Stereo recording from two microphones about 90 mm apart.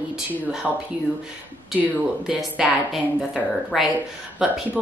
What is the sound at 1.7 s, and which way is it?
A woman's voice, 10° right (ahead or behind).